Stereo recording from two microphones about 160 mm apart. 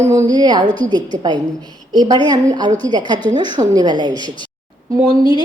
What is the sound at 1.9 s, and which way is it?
A woman's voice, 25° right (ahead or behind).